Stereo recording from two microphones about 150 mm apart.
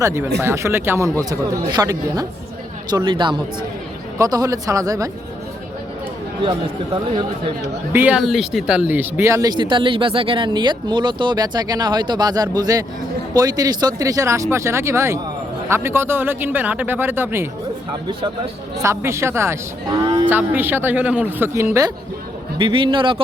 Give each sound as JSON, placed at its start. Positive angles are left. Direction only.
{"t": 0.0, "sound": "a man's voice", "side_deg": -15}
{"t": 7.9, "sound": "speech", "side_deg": -10}
{"t": 18.8, "sound": "speech", "side_deg": -20}
{"t": 22.5, "sound": "a man's voice", "side_deg": -35}